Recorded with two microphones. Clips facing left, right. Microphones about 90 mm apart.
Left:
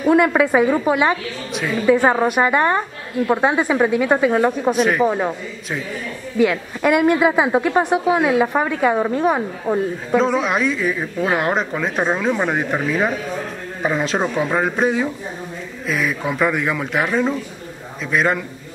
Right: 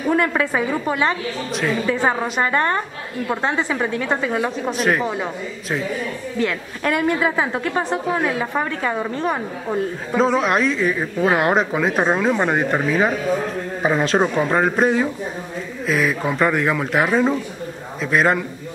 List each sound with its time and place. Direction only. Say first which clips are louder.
0.1 s a woman's voice: left 5 dB; 10° left (ahead or behind)